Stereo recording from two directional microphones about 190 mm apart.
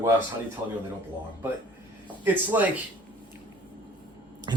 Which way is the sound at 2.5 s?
10° right (ahead or behind).